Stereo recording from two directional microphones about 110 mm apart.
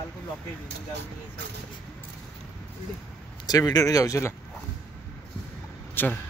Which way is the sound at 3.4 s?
35° left (ahead or behind).